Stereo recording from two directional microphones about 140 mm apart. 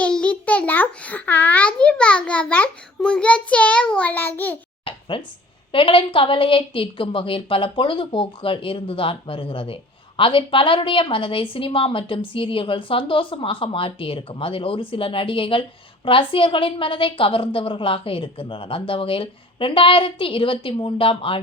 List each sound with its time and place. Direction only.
0.0 s a child's voice: 10° left (ahead or behind)
4.9 s a sound: 40° left (ahead or behind)
5.7 s a woman's voice: 40° left (ahead or behind)